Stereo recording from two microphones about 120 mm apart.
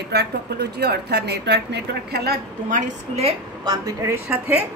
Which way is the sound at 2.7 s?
80° right.